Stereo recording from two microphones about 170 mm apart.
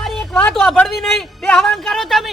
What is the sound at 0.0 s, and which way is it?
Speech, centre (ahead or behind).